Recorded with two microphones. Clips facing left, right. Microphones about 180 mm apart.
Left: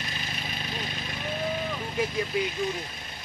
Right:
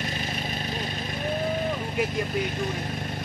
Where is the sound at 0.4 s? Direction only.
40° right (ahead or behind).